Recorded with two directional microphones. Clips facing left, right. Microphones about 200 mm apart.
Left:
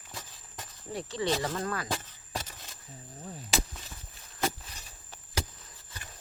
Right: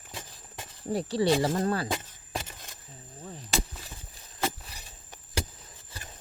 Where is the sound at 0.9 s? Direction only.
35° right (ahead or behind).